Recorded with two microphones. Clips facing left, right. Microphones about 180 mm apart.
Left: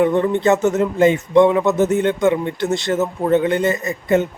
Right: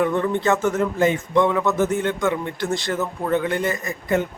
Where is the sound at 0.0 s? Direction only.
20° left (ahead or behind).